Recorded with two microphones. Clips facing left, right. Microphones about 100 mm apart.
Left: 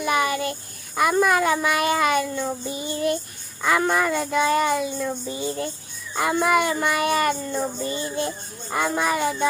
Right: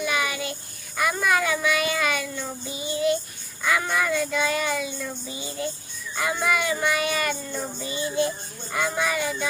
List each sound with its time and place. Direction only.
0.0 s child singing: 45° left (ahead or behind)
0.9 s a child's voice: 45° left (ahead or behind)